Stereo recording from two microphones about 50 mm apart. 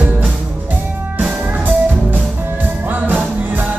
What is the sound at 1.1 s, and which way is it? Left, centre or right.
Music, right.